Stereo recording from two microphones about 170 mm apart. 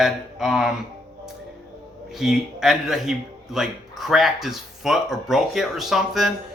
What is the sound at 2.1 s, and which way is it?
Speech, centre (ahead or behind).